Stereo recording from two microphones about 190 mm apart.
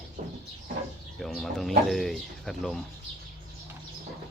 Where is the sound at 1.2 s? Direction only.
Centre (ahead or behind).